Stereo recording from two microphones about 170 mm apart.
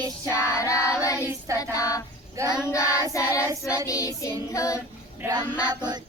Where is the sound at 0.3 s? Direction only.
15° left (ahead or behind).